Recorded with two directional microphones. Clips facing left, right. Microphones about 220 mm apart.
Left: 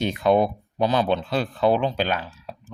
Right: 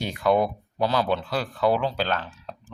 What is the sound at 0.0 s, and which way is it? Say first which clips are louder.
Speech: left 3 dB; 20° left (ahead or behind).